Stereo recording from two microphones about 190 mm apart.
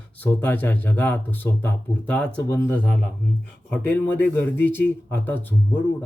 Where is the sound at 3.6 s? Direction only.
10° left (ahead or behind).